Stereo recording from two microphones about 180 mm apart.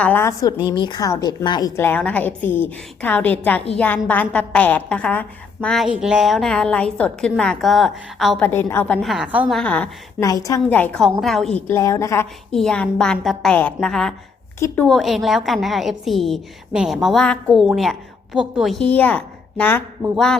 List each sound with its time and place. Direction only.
0.0 s a woman's voice: 10° left (ahead or behind)
0.5 s a woman's voice: 25° left (ahead or behind); by 8.4 s centre (ahead or behind)
8.4 s a woman's voice: 10° left (ahead or behind); by 9.6 s 10° right (ahead or behind)
9.6 s a woman's voice: 5° left (ahead or behind)
10.2 s a woman's voice: 20° left (ahead or behind); by 11.6 s centre (ahead or behind)
11.7 s a woman's voice: 15° left (ahead or behind); by 17.9 s centre (ahead or behind)
18.9 s a woman's voice: 10° left (ahead or behind)